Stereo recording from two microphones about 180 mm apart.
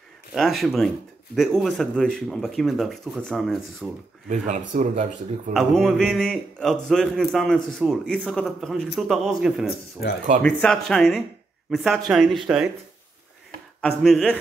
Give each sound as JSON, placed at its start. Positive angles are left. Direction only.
{"t": 0.3, "sound": "speech", "side_deg": 0}
{"t": 4.3, "sound": "speech", "side_deg": -40}
{"t": 5.5, "sound": "speech", "side_deg": 0}
{"t": 13.7, "sound": "speech", "side_deg": 0}